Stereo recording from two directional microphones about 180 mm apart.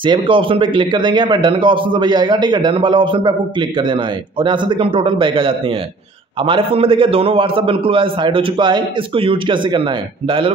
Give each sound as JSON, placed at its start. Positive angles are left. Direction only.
{"t": 0.0, "sound": "a man's voice", "side_deg": -30}
{"t": 4.4, "sound": "a man's voice", "side_deg": -25}